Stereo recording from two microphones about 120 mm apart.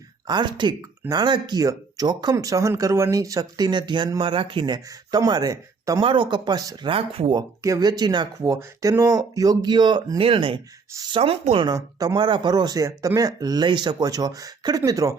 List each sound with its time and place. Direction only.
0.3 s speech: 40° right (ahead or behind)
6.0 s speech: 45° right (ahead or behind)
6.9 s speech: 50° right (ahead or behind)
7.3 s speech: 30° right (ahead or behind); by 11.7 s 50° right (ahead or behind)
11.7 s speech: 30° right (ahead or behind)